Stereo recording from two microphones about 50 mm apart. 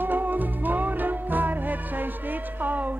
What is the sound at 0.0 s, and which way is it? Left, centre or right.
Music, right.